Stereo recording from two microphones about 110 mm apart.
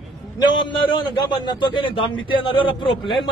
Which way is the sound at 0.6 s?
45° left (ahead or behind).